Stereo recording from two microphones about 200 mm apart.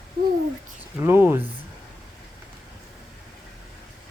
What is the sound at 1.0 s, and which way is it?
Speech, 10° right (ahead or behind).